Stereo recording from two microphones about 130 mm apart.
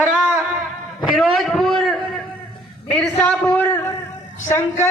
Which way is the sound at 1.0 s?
Centre (ahead or behind).